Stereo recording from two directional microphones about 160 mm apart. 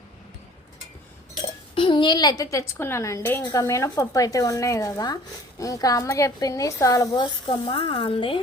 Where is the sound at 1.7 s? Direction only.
30° left (ahead or behind).